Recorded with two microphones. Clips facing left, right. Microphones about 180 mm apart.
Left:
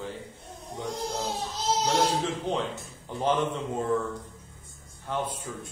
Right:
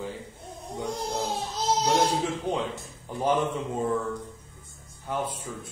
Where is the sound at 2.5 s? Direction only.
10° right (ahead or behind).